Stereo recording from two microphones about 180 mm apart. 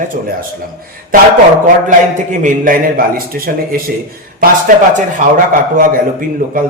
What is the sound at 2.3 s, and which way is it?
A man's voice, 45° right (ahead or behind).